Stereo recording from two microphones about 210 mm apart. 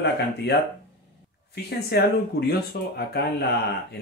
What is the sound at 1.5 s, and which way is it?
Speech, 50° left (ahead or behind).